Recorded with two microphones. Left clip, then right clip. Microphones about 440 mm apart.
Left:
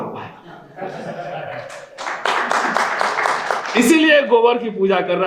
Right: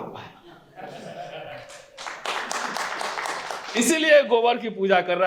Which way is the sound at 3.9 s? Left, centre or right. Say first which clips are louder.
Left 4 dB; right.